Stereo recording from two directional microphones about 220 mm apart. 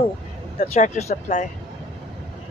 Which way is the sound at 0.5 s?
30° left (ahead or behind).